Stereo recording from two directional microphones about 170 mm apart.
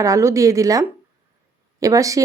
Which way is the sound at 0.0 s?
20° right (ahead or behind).